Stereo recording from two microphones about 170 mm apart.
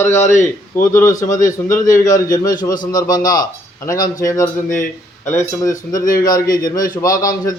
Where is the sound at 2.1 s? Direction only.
20° left (ahead or behind).